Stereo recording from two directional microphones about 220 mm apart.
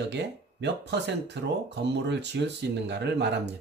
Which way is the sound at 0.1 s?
50° right (ahead or behind).